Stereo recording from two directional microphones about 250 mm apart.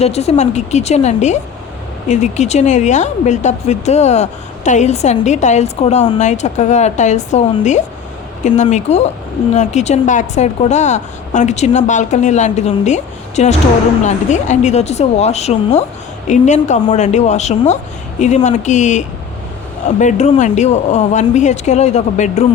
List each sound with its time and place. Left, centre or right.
0.0 s speech: left